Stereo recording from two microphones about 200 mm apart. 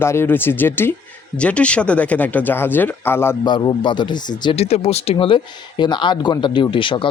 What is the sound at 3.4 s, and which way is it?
Speech, 25° left (ahead or behind).